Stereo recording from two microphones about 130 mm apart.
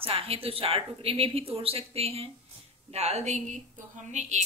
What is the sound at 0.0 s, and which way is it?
A woman's voice, 45° right (ahead or behind).